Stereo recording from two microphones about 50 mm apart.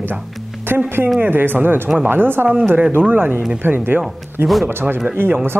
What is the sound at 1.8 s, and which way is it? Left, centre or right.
Speech, right.